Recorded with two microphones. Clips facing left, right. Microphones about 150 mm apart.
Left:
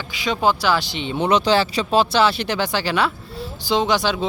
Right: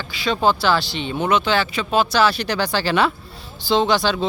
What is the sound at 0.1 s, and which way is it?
Speech, 15° left (ahead or behind).